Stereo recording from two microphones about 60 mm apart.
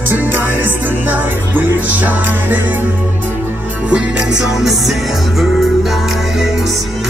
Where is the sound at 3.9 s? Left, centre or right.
Centre.